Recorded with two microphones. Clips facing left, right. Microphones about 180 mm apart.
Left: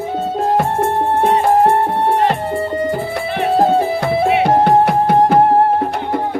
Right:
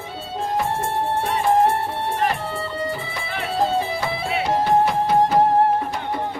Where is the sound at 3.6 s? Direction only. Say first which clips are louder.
Left 6 dB; 55° left (ahead or behind).